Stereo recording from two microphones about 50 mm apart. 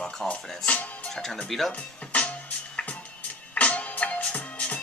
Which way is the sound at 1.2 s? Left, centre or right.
Centre.